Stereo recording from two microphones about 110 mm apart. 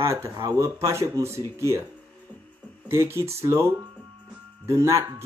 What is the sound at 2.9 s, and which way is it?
Speech, 25° right (ahead or behind).